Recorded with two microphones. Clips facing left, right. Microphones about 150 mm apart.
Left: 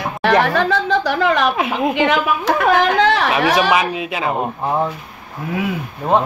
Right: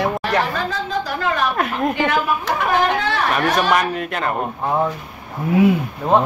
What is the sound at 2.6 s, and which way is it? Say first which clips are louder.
Speech: left 5 dB; 90° left.